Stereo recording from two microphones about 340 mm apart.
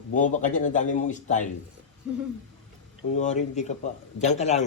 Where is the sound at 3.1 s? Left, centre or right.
Left.